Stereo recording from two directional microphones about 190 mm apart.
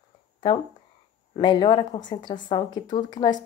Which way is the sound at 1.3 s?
25° left (ahead or behind).